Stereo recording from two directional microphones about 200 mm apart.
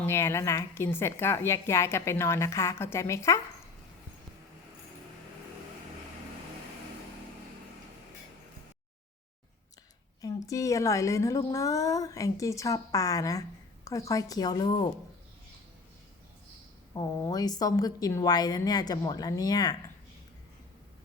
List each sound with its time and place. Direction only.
0.0 s a woman's voice: 10° left (ahead or behind)
10.2 s a woman's voice: 15° left (ahead or behind)
16.9 s speech: 20° left (ahead or behind)